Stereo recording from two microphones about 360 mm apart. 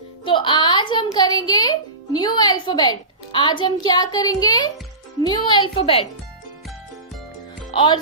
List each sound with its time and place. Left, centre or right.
0.2 s music: centre
1.1 s a woman's voice: centre
7.7 s speech: centre